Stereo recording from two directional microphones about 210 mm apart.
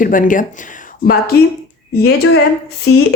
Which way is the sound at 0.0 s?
40° left (ahead or behind).